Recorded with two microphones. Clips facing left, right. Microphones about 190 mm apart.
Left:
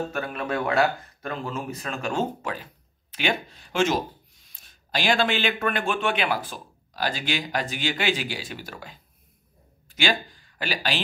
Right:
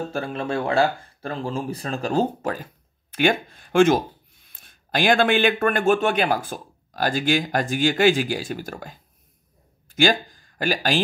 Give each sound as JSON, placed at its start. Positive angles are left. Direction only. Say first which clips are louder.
{"t": 0.1, "sound": "speech", "louder": "right 3 dB", "side_deg": -30}